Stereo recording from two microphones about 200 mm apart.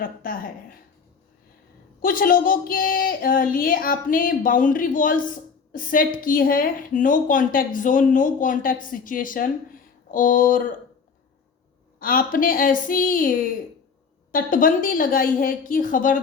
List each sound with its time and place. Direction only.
0.0 s a sound: 45° left (ahead or behind)
2.0 s a woman's voice: 45° left (ahead or behind)
11.9 s a woman's voice: 45° left (ahead or behind)